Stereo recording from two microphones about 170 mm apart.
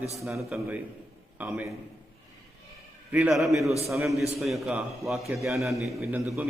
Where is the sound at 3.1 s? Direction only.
5° right (ahead or behind).